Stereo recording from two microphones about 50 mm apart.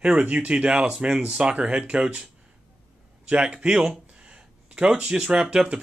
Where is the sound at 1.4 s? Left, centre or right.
Right.